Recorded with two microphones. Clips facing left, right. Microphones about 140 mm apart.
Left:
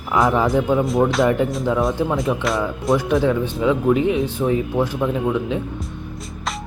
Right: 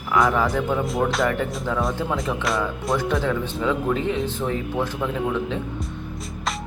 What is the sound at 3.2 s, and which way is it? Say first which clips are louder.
Speech: left 5 dB; 15° left (ahead or behind).